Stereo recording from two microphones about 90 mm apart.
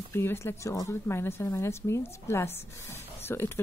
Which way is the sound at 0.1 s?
25° left (ahead or behind).